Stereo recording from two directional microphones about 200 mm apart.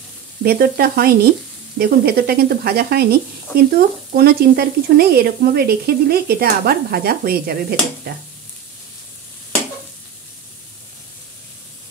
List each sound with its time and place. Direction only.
0.4 s speech: 50° right (ahead or behind)